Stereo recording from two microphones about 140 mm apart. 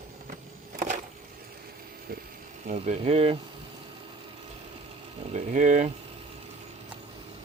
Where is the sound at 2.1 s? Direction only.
90° right.